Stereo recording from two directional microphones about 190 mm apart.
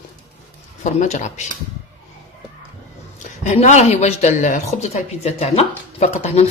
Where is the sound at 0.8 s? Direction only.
40° left (ahead or behind).